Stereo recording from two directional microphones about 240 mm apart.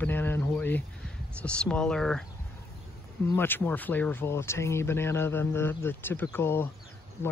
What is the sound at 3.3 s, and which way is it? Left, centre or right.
Speech, centre.